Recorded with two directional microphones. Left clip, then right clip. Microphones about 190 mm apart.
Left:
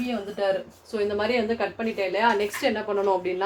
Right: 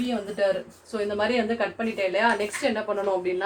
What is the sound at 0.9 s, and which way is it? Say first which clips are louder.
Speech: left 1 dB; 25° left (ahead or behind).